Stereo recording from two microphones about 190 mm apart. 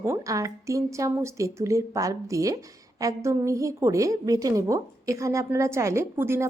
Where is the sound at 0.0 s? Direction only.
15° right (ahead or behind).